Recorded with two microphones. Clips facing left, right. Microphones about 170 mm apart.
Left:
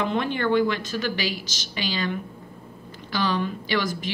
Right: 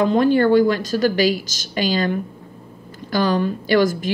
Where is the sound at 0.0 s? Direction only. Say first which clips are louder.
Right 9 dB; 40° right (ahead or behind).